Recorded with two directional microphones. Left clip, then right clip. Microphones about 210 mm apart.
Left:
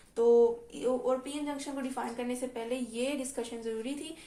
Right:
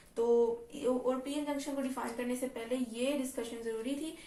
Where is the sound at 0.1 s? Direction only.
45° left (ahead or behind).